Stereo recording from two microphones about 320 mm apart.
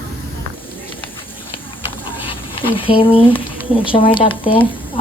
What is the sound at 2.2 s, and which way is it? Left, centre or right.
Speech, centre.